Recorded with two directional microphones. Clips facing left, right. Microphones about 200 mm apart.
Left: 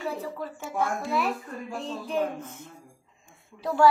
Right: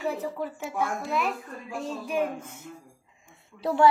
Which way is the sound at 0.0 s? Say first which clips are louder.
Right 2 dB; 20° right (ahead or behind).